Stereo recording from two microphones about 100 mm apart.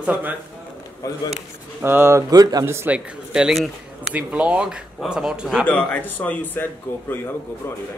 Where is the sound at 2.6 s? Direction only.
20° right (ahead or behind); by 4.1 s centre (ahead or behind).